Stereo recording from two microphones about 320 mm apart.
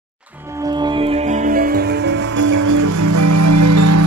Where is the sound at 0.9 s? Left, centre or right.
Centre.